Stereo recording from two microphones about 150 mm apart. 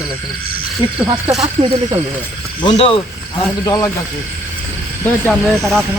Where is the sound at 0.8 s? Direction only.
30° right (ahead or behind).